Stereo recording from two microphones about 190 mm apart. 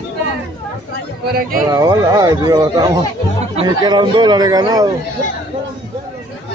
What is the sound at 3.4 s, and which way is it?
Speech, 30° right (ahead or behind).